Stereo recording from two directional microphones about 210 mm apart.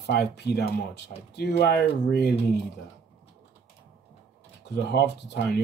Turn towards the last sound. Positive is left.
turn(degrees=50)  # may be behind; listen again after turning